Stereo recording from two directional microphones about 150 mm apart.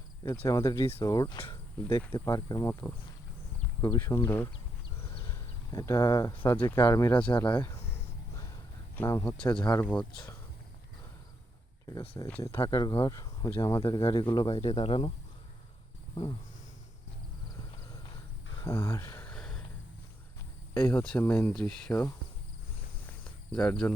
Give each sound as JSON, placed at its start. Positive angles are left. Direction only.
{"t": 0.2, "sound": "speech", "side_deg": 20}
{"t": 1.4, "sound": "speech", "side_deg": 35}
{"t": 2.1, "sound": "speech", "side_deg": 25}
{"t": 5.2, "sound": "a sound", "side_deg": 20}
{"t": 6.4, "sound": "speech", "side_deg": 15}
{"t": 7.3, "sound": "speech", "side_deg": 30}
{"t": 9.0, "sound": "speech", "side_deg": 15}
{"t": 9.5, "sound": "speech", "side_deg": 30}
{"t": 12.4, "sound": "speech", "side_deg": 20}
{"t": 14.0, "sound": "speech", "side_deg": 35}
{"t": 18.6, "sound": "a sound", "side_deg": 20}
{"t": 20.7, "sound": "speech", "side_deg": 15}
{"t": 23.0, "sound": "cricket", "side_deg": 10}